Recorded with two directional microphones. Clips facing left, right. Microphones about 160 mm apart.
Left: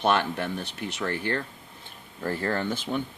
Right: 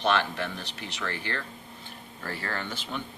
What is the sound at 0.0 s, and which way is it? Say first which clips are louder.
Speech: left 2 dB; 50° left (ahead or behind).